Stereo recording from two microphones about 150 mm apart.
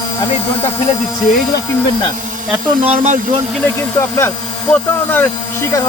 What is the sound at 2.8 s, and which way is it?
Speech, 50° right (ahead or behind).